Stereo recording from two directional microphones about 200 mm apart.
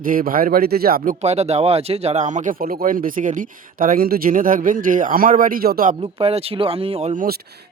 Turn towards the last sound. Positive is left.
turn(degrees=-40)  # may be behind; listen again after turning